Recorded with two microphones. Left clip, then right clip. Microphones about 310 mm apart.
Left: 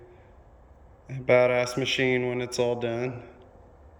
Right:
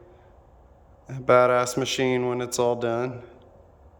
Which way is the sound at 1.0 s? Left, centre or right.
Centre.